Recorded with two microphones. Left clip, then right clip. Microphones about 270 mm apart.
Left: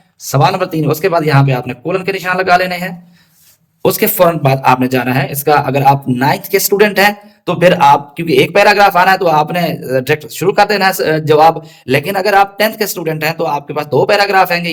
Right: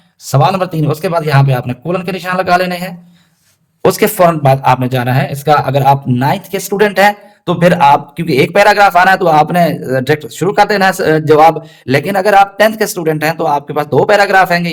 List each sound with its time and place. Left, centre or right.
0.3 s a man's voice: right
3.8 s speech: centre